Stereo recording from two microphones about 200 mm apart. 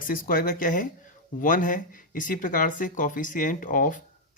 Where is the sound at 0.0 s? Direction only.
45° left (ahead or behind).